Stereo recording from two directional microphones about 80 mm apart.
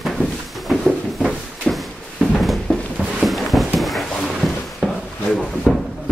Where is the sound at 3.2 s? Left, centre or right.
Centre.